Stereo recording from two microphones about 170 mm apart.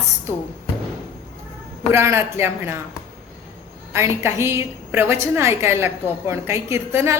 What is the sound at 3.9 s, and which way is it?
A woman's voice, 15° right (ahead or behind).